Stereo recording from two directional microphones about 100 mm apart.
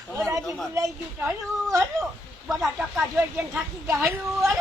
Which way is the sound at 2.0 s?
5° right (ahead or behind).